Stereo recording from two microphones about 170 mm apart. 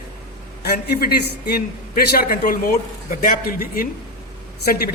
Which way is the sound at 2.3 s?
55° left (ahead or behind).